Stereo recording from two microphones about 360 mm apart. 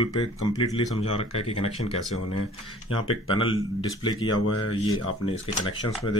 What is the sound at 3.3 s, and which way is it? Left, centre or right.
Speech, centre.